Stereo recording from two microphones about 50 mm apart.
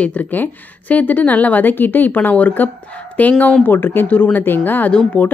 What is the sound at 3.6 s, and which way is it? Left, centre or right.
A woman's voice, left.